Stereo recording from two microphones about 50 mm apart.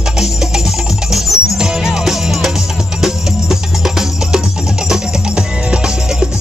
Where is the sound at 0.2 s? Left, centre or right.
Centre.